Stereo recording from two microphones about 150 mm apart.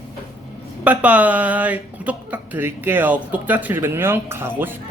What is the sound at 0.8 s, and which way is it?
Speech, 10° right (ahead or behind).